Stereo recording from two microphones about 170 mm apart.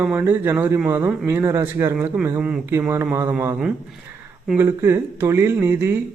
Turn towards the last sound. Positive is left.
turn(degrees=-15)  # may be behind; listen again after turning